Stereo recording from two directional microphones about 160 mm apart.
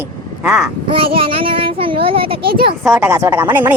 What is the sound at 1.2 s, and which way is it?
Speech, 35° right (ahead or behind).